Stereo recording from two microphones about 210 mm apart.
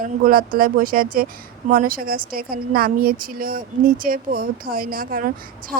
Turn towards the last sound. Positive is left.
turn(degrees=0)  # may be behind; listen again after turning